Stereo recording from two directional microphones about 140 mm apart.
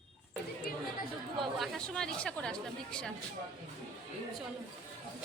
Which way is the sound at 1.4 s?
Centre (ahead or behind).